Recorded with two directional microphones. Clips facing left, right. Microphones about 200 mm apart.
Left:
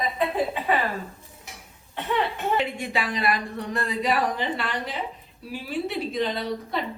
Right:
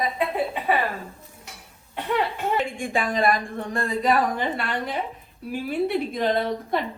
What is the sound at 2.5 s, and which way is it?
A woman's voice, 50° right (ahead or behind).